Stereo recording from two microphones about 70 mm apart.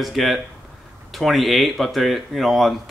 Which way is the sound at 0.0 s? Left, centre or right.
Centre.